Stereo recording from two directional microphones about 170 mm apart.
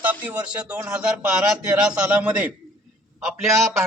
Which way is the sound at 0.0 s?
10° right (ahead or behind).